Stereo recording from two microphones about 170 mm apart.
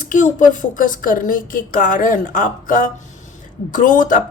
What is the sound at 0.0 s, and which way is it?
Speech, 50° left (ahead or behind).